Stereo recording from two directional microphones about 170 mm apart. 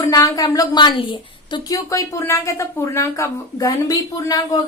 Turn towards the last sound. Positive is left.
turn(degrees=20)  # may be behind; listen again after turning